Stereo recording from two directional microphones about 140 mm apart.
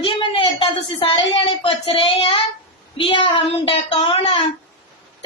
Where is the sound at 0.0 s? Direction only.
35° left (ahead or behind).